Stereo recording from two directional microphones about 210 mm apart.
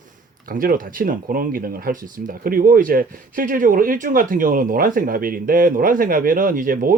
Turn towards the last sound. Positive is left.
turn(degrees=-40)  # may be behind; listen again after turning